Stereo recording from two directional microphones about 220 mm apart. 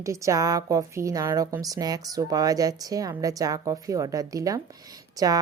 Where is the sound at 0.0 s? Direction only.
15° right (ahead or behind).